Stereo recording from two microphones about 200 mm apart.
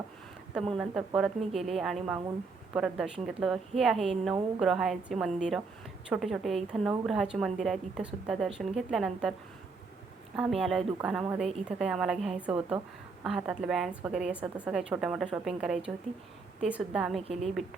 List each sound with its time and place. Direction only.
0.8 s a woman's voice: centre (ahead or behind)
10.3 s a woman's voice: 5° right (ahead or behind)